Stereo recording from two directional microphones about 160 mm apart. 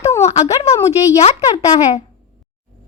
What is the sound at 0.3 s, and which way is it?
A woman's voice, 40° left (ahead or behind).